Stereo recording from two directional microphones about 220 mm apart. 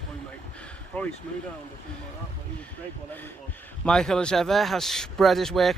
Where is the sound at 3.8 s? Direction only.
5° left (ahead or behind).